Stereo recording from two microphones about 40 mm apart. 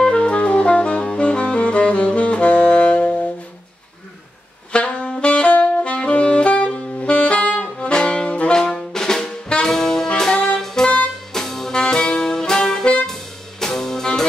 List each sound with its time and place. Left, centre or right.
0.0 s saxophone: left
4.7 s saxophone: left
7.8 s saxophone: left
8.3 s saxophone: left
8.7 s music: centre
11.8 s saxophone: left
13.0 s music: centre